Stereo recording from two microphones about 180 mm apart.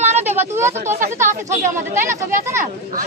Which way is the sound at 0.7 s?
40° right (ahead or behind).